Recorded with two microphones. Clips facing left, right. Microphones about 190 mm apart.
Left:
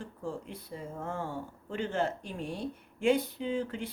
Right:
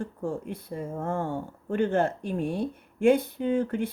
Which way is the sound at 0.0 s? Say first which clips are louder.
Right 7 dB; 55° right (ahead or behind).